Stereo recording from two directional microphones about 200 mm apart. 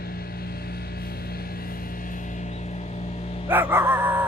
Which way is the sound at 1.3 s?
45° left (ahead or behind).